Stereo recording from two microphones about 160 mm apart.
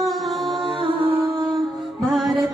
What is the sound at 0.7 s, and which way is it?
Music, 30° right (ahead or behind).